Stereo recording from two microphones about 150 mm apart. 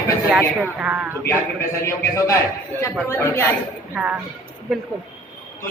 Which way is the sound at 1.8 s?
20° left (ahead or behind).